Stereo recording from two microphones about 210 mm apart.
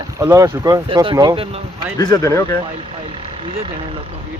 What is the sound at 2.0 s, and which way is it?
Speech, 20° left (ahead or behind).